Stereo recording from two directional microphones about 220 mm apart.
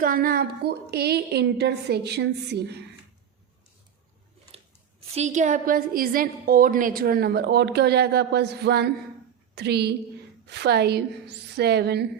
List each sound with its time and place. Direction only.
0.0 s a woman's voice: 40° right (ahead or behind)
5.1 s a woman's voice: 30° right (ahead or behind); by 12.0 s 50° right (ahead or behind)